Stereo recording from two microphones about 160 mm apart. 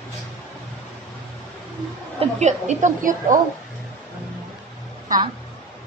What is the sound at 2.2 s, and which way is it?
A woman's voice, 45° right (ahead or behind).